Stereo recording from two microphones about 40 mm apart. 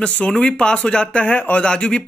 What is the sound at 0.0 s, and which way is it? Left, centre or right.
Speech, left.